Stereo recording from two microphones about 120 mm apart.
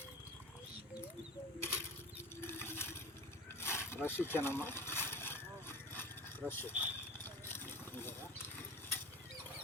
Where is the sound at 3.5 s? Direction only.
20° left (ahead or behind).